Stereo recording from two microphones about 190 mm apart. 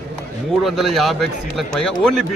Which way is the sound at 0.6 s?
Centre (ahead or behind).